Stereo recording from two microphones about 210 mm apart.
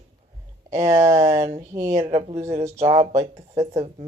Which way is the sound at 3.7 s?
30° right (ahead or behind).